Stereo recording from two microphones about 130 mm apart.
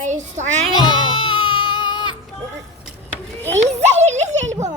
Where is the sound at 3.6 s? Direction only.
60° right (ahead or behind).